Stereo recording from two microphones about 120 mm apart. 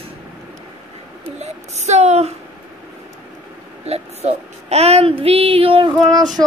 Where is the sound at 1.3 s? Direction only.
70° right (ahead or behind).